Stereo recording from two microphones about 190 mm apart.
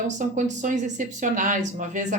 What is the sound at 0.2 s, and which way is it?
Speech, 40° right (ahead or behind).